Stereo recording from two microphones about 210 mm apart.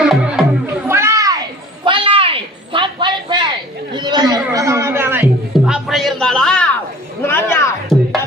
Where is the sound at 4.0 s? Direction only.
20° right (ahead or behind).